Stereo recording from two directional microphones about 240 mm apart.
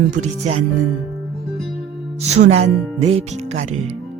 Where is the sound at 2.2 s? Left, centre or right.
Right.